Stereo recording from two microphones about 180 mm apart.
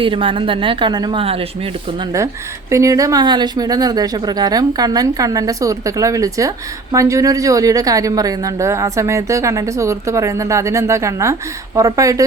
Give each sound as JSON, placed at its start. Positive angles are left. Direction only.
{"t": 0.0, "sound": "speech", "side_deg": -30}
{"t": 2.1, "sound": "speech", "side_deg": -15}